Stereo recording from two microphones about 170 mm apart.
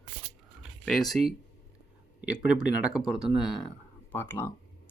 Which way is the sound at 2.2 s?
5° right (ahead or behind).